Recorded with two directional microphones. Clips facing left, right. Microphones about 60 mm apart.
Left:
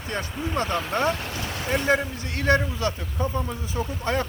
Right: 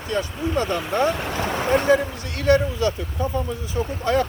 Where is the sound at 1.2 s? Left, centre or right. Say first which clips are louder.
Right 7 dB; right.